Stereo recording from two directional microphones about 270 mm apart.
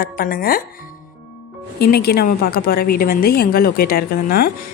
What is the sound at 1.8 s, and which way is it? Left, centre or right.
A woman's voice, left.